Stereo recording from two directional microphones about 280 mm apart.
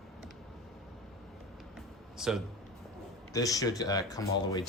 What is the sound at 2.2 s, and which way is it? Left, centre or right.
Speech, centre.